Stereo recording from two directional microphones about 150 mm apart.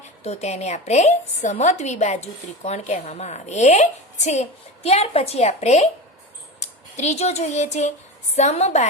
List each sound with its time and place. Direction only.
0.2 s a woman's voice: 45° left (ahead or behind)